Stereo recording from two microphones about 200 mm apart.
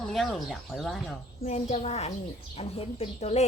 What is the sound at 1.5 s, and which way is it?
Speech, 35° left (ahead or behind).